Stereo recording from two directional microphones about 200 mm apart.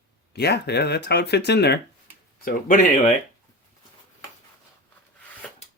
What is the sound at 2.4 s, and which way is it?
Speech, 45° left (ahead or behind).